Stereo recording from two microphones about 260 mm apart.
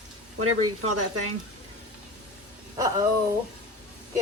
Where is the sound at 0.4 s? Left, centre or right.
Right.